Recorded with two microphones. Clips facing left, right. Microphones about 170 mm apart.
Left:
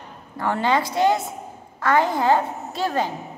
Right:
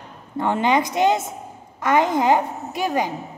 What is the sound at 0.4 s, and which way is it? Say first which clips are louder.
A woman's voice: right 2 dB; 20° right (ahead or behind).